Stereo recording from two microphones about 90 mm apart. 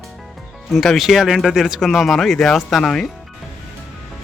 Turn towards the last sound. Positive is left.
turn(degrees=5)  # may be behind; listen again after turning